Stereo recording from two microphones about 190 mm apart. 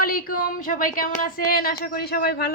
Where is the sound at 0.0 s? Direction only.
50° left (ahead or behind).